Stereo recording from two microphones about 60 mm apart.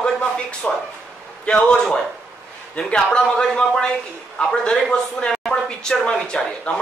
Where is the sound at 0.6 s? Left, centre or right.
Left.